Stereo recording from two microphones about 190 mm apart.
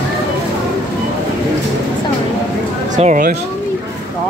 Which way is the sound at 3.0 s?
45° right (ahead or behind).